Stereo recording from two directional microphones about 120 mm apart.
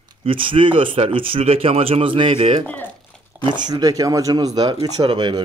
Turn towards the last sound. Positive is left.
turn(degrees=-40)  # may be behind; listen again after turning